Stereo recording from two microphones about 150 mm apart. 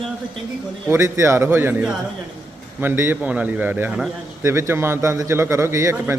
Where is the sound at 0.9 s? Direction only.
15° right (ahead or behind).